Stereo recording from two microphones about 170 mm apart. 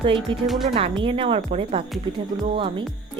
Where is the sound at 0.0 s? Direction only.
30° right (ahead or behind).